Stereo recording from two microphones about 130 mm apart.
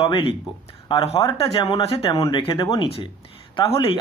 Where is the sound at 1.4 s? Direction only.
40° left (ahead or behind).